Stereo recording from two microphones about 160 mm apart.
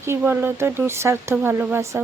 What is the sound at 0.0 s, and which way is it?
Speech, 15° right (ahead or behind).